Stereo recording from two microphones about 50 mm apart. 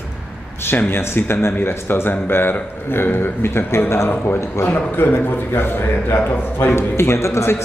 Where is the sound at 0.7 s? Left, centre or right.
Left.